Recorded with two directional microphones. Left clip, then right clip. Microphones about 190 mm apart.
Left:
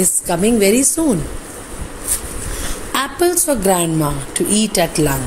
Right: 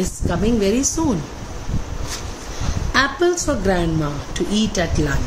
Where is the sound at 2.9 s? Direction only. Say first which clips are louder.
Even; 20° left (ahead or behind).